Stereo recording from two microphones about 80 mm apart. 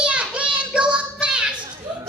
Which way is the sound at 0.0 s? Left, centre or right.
Centre.